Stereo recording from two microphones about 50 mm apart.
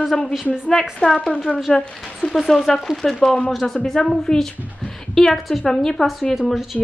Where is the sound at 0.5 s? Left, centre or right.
Centre.